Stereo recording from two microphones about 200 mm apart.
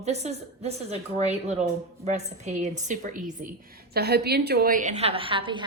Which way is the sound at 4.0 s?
55° right (ahead or behind).